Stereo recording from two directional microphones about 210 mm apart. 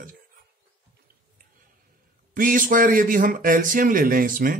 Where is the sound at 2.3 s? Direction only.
40° right (ahead or behind).